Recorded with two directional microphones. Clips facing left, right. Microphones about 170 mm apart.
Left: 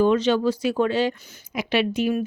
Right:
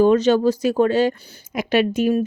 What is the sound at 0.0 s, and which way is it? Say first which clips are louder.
Speech: right 4 dB; 45° right (ahead or behind).